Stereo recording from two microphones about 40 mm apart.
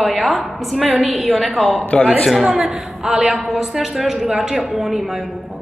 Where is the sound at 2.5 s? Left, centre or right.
Centre.